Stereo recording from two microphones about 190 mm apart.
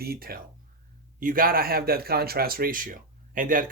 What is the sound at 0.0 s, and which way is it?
A man's voice, 55° right (ahead or behind).